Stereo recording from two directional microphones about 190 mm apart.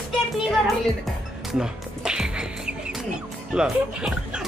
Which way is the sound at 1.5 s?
5° right (ahead or behind).